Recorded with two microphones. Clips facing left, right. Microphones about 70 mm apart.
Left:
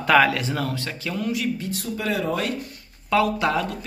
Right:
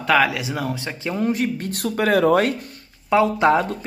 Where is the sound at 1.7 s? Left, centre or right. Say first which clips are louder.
Right 7 dB; right.